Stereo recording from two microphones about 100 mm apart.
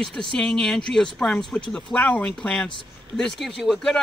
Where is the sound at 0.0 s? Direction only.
5° left (ahead or behind).